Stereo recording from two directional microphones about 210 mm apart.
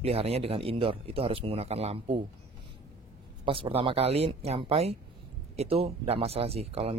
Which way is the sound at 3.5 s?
25° right (ahead or behind).